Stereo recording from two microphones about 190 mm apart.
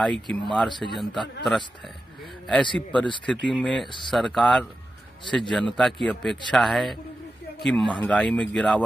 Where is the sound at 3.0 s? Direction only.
25° left (ahead or behind).